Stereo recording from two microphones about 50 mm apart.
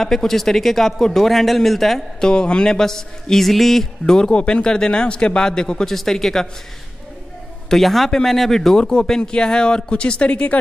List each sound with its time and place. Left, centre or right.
0.0 s speech: centre
2.1 s speech: centre
4.0 s speech: centre
7.7 s speech: centre; by 10.6 s left